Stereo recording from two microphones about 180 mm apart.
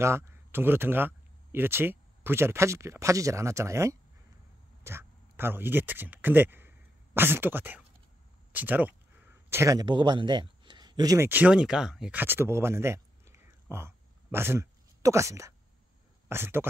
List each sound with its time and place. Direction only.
0.0 s speech: 15° right (ahead or behind)